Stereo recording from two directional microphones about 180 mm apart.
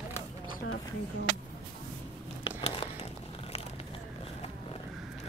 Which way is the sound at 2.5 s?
30° left (ahead or behind).